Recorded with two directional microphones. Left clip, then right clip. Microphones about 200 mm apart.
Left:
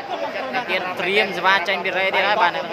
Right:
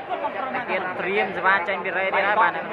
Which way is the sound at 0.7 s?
10° left (ahead or behind).